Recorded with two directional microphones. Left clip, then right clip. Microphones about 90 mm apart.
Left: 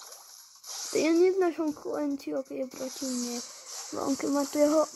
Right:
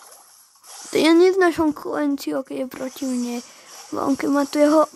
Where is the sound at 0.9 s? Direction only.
75° right (ahead or behind).